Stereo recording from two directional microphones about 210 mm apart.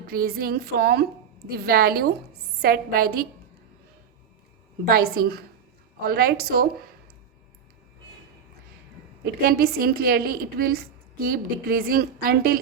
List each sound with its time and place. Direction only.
0.1 s a woman's voice: 45° right (ahead or behind)
4.9 s a woman's voice: 45° right (ahead or behind)
9.2 s a woman's voice: 45° right (ahead or behind)